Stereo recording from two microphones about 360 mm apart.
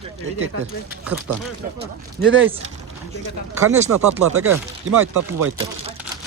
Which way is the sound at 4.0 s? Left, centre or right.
Right.